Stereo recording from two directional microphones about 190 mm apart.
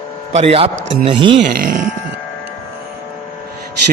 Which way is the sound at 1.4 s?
50° right (ahead or behind).